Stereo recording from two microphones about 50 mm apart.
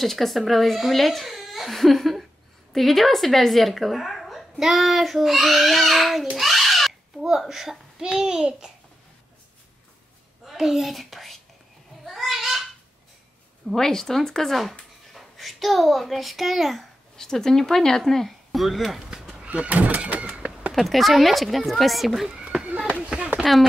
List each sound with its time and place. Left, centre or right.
0.0 s a woman's voice: centre
10.4 s a child's voice: centre
12.0 s a sound: centre
13.7 s speech: centre
17.2 s speech: centre
19.4 s speech: right
20.7 s a woman's voice: centre
22.4 s a sound: centre